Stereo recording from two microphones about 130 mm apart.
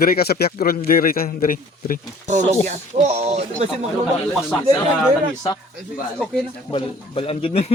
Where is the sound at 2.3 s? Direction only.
60° right (ahead or behind).